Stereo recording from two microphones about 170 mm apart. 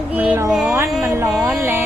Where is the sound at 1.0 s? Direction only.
15° right (ahead or behind).